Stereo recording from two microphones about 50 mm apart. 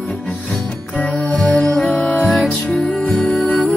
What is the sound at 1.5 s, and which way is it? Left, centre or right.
Music, left.